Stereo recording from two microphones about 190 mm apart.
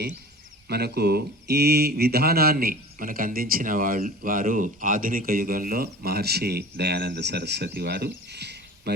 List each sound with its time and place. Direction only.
0.7 s speech: 55° right (ahead or behind)
7.8 s cricket: 55° right (ahead or behind)